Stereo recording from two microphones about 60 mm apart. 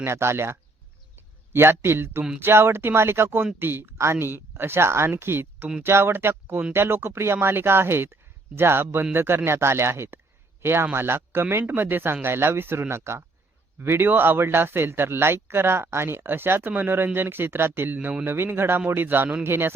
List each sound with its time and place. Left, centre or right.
0.0 s a man's voice: right
3.9 s a man's voice: right